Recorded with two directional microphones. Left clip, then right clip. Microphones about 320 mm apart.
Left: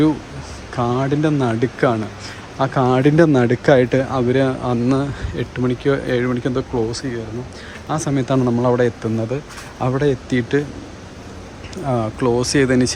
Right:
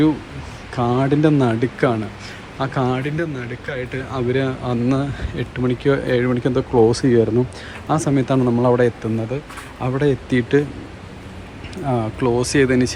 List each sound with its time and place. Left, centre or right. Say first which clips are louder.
0.8 s speech: right 1 dB; centre
7.0 s speech: right 10 dB; centre
7.9 s speech: right 2 dB; centre
11.9 s speech: left 1 dB; centre